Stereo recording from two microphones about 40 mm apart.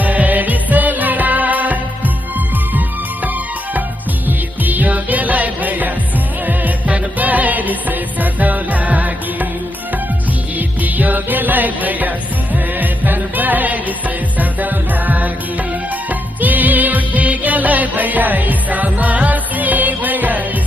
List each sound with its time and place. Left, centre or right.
0.0 s music: right
4.3 s music: right
10.8 s music: right